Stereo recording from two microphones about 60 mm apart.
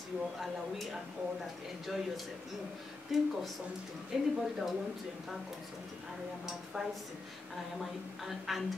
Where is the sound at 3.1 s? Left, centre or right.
Centre.